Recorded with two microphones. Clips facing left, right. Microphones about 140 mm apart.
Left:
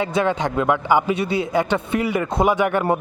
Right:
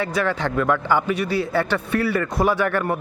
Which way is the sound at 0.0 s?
20° left (ahead or behind).